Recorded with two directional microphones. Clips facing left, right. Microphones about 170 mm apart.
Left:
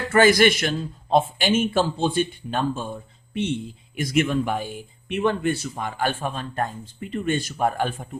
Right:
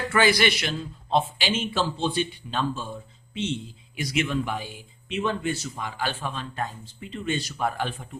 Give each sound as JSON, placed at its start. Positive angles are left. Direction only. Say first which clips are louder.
{"t": 0.1, "sound": "speech", "louder": "left 6 dB", "side_deg": 45}